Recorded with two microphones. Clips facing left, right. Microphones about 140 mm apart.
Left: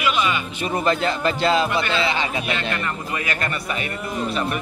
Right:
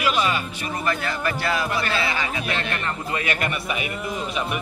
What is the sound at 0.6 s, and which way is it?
A man's voice, 25° left (ahead or behind).